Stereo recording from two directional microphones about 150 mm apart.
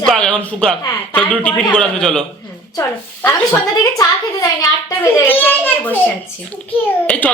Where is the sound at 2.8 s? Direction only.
15° left (ahead or behind).